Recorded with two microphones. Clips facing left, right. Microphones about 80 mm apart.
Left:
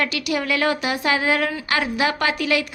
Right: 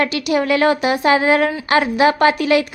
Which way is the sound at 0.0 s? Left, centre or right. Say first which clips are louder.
Right 6 dB; right.